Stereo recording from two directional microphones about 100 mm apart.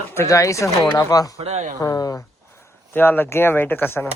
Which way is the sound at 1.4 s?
90° right.